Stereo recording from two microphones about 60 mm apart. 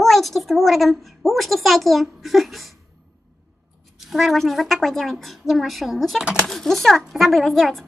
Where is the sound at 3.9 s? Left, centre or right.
Centre.